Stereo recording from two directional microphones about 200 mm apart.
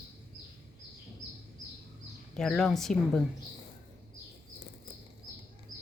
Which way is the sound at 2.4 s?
Centre (ahead or behind).